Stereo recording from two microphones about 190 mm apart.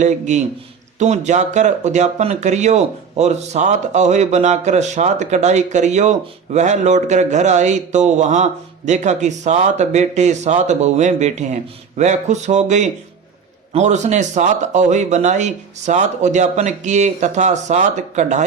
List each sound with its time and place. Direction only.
0.0 s speech: 40° right (ahead or behind)